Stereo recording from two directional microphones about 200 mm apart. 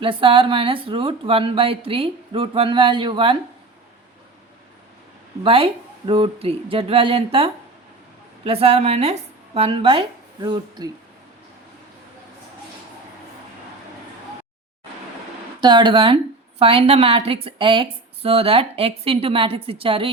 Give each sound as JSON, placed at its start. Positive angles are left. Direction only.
{"t": 0.0, "sound": "a woman's voice", "side_deg": -25}
{"t": 5.4, "sound": "a woman's voice", "side_deg": -25}
{"t": 15.6, "sound": "a woman's voice", "side_deg": -25}